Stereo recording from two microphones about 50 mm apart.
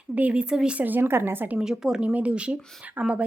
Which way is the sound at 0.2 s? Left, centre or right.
Right.